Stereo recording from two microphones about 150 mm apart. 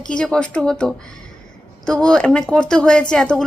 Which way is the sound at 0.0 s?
5° left (ahead or behind).